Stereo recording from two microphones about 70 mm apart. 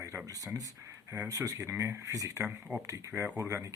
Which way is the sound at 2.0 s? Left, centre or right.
Right.